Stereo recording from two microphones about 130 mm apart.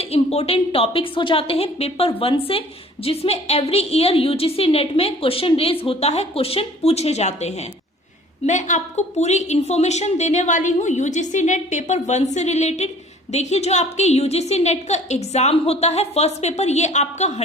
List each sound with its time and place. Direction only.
0.0 s a woman's voice: 50° left (ahead or behind)